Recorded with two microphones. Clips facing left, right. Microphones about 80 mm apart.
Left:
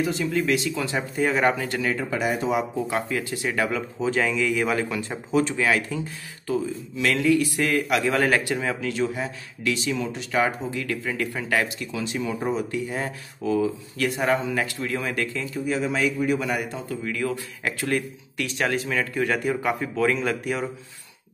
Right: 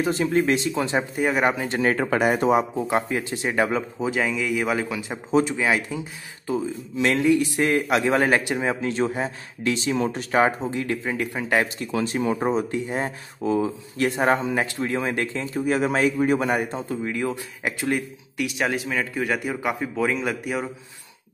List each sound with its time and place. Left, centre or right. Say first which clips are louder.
0.0 s speech: right 3 dB; right
1.1 s speech: left 2 dB; centre
1.8 s speech: right 5 dB; right
2.9 s speech: right 3 dB; right
4.0 s speech: left 4 dB; centre